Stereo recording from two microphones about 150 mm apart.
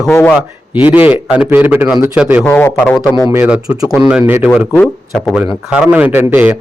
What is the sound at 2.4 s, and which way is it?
Speech, 15° left (ahead or behind).